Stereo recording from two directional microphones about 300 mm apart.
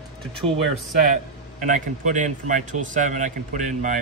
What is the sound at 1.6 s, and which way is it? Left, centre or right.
A man's voice, right.